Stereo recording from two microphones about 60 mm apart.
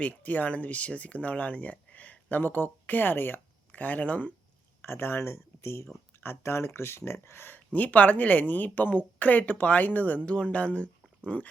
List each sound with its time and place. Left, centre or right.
0.0 s speech: left
4.8 s speech: left
7.7 s speech: left